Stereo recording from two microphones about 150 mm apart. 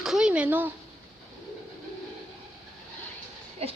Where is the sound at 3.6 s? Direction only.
45° right (ahead or behind).